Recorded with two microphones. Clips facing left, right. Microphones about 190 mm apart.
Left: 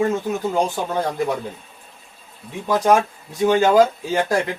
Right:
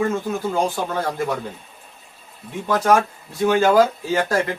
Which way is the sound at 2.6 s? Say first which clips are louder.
Left 1 dB; 15° left (ahead or behind).